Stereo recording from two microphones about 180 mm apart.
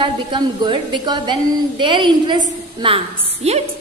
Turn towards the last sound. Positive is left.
turn(degrees=-35)  # may be behind; listen again after turning